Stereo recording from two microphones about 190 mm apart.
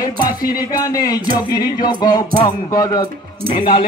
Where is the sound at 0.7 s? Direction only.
20° left (ahead or behind).